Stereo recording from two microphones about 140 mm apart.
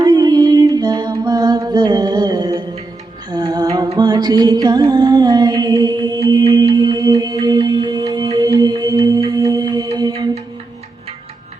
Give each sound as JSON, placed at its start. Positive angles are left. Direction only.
{"t": 0.0, "sound": "music", "side_deg": -30}
{"t": 10.1, "sound": "music", "side_deg": -45}